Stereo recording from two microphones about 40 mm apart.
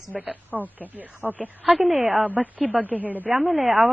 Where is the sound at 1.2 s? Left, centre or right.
Right.